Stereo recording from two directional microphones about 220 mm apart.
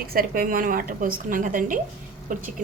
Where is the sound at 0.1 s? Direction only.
40° right (ahead or behind).